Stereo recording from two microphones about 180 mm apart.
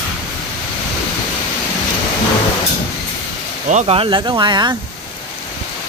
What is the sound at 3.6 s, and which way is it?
Speech, 40° right (ahead or behind).